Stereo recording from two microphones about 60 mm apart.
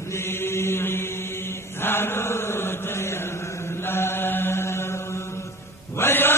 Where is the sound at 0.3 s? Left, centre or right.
Left.